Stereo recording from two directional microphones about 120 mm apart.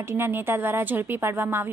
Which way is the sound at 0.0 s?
20° right (ahead or behind).